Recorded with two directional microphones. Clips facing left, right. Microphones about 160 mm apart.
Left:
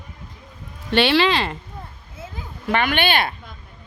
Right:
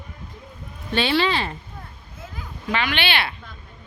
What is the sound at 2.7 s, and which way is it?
Speech, 50° left (ahead or behind).